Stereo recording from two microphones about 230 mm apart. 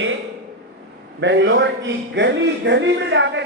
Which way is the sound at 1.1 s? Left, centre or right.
Right.